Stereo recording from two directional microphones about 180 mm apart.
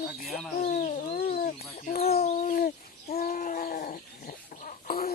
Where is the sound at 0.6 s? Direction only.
45° left (ahead or behind).